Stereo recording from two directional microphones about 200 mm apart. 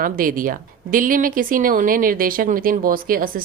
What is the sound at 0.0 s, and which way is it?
Speech, 45° right (ahead or behind).